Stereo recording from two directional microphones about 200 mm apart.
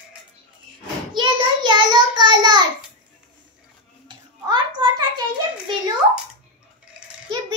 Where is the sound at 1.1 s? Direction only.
20° right (ahead or behind).